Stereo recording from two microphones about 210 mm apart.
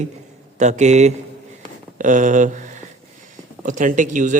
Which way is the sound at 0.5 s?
35° right (ahead or behind).